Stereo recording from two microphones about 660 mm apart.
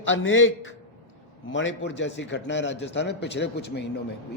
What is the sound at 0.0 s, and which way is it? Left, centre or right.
Speech, centre.